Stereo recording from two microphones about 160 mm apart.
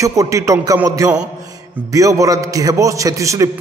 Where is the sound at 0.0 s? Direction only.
20° right (ahead or behind).